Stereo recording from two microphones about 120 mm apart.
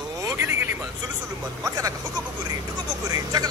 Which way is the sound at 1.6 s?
25° right (ahead or behind).